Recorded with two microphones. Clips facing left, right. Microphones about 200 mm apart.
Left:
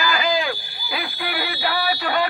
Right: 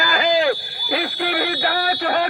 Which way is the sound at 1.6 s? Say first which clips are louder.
Right 2 dB; 50° right (ahead or behind).